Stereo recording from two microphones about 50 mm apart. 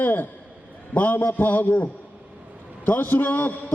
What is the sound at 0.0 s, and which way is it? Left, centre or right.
A man's voice, left.